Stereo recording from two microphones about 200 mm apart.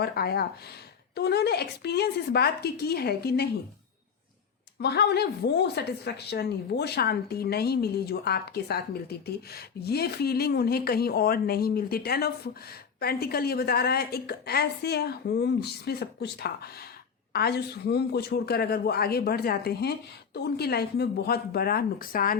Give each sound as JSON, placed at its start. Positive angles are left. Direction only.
{"t": 0.0, "sound": "a woman's voice", "side_deg": 50}
{"t": 4.8, "sound": "a woman's voice", "side_deg": 55}